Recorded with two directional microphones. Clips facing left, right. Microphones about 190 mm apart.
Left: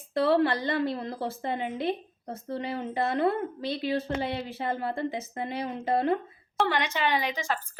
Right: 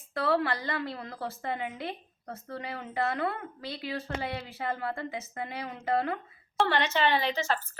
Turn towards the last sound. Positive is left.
turn(degrees=10)  # may be behind; listen again after turning